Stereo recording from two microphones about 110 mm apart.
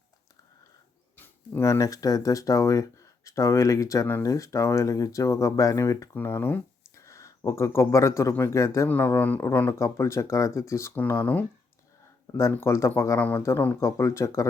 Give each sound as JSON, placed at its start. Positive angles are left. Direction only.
{"t": 1.1, "sound": "speech", "side_deg": 20}
{"t": 6.1, "sound": "speech", "side_deg": 20}
{"t": 8.9, "sound": "speech", "side_deg": 15}
{"t": 12.4, "sound": "speech", "side_deg": 25}
{"t": 13.1, "sound": "speech", "side_deg": 15}